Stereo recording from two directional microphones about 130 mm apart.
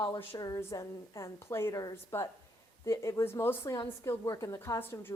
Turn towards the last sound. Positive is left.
turn(degrees=15)  # may be behind; listen again after turning